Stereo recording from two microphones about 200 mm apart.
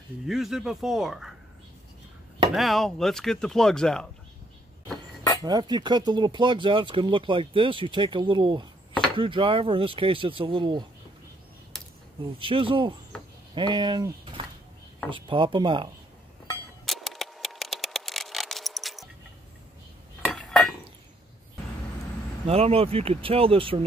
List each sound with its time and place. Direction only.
0.3 s speech: centre (ahead or behind)
2.5 s speech: centre (ahead or behind)
5.4 s speech: 20° right (ahead or behind)
12.4 s speech: 25° right (ahead or behind)
16.8 s a sound: centre (ahead or behind)
20.2 s cutlery: 5° left (ahead or behind)
22.5 s speech: 30° right (ahead or behind)